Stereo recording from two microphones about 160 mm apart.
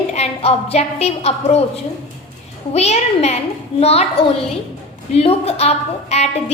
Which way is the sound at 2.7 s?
40° left (ahead or behind).